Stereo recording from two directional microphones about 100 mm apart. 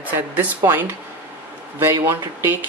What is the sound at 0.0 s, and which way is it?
Speech, 20° right (ahead or behind).